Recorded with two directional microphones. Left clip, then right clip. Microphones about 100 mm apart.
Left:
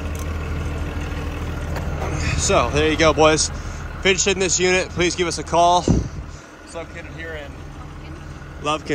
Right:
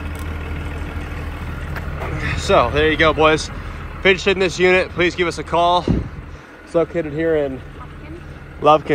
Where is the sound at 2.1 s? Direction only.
20° left (ahead or behind).